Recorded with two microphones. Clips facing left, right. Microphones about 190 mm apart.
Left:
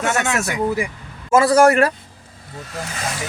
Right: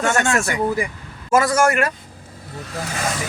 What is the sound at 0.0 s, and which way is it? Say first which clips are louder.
Speech: right 1 dB; 5° left (ahead or behind).